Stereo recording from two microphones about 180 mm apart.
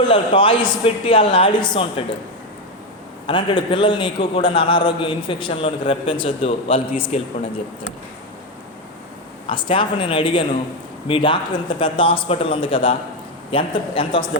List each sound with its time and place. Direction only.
0.1 s a man's voice: 30° left (ahead or behind)
3.2 s a man's voice: 25° left (ahead or behind)
9.5 s a man's voice: 30° left (ahead or behind)